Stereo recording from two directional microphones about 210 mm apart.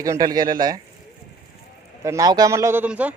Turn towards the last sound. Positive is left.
turn(degrees=-5)  # may be behind; listen again after turning